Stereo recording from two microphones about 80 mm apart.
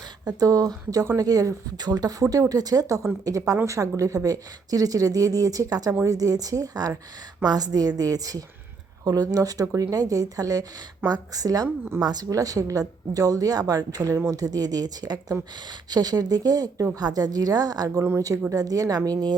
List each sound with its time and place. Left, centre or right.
0.3 s speech: right